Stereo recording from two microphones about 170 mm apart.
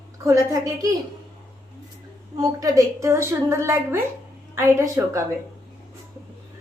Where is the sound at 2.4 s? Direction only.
20° right (ahead or behind).